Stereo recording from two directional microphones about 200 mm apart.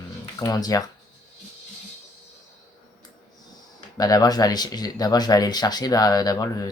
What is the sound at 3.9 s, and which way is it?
Speech, 20° left (ahead or behind).